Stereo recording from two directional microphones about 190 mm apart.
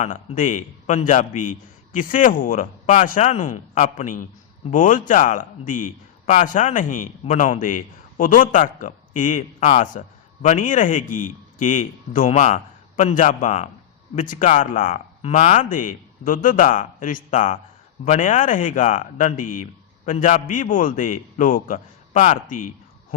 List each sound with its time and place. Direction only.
0.0 s a man's voice: 40° left (ahead or behind)